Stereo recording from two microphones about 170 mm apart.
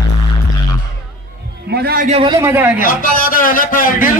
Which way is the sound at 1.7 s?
65° right (ahead or behind).